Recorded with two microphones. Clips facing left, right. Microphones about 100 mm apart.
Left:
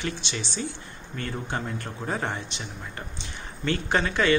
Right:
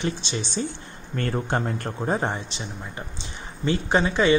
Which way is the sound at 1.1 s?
50° right (ahead or behind).